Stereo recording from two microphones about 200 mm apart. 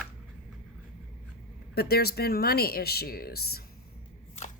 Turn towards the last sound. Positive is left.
turn(degrees=50)  # may be behind; listen again after turning